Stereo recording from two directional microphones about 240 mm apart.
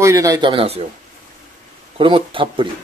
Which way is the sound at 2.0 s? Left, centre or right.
Right.